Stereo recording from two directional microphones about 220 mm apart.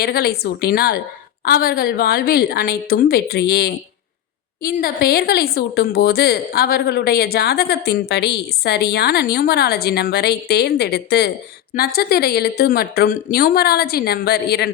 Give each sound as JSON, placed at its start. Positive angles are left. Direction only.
{"t": 0.0, "sound": "a woman's voice", "side_deg": 45}